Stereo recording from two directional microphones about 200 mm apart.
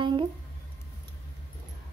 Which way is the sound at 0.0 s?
25° right (ahead or behind).